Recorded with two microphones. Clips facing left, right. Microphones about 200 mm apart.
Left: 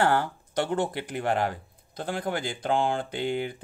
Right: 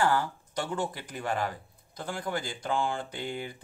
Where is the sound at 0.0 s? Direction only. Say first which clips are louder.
Left 3 dB; 65° left (ahead or behind).